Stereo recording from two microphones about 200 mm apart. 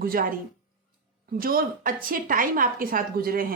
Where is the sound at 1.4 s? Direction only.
45° right (ahead or behind).